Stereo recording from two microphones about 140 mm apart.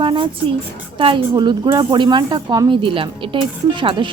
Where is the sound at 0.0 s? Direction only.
35° right (ahead or behind).